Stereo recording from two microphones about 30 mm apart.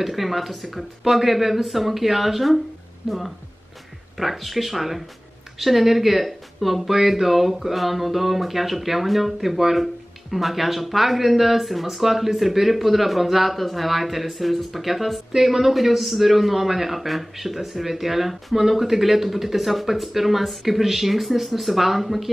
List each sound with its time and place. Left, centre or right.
0.0 s speech: centre
3.0 s speech: right
4.2 s speech: centre